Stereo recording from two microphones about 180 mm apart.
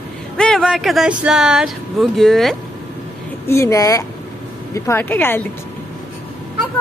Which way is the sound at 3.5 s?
15° left (ahead or behind).